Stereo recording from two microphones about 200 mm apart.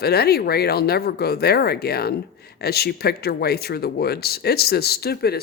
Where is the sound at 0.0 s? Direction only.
50° left (ahead or behind).